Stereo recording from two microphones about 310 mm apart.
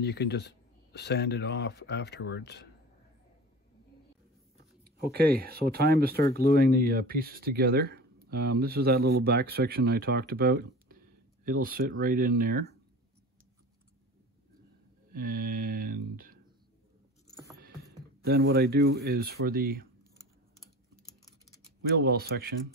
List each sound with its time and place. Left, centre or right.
0.0 s speech: left
4.8 s speech: right
15.1 s speech: right
18.5 s speech: right
21.8 s speech: right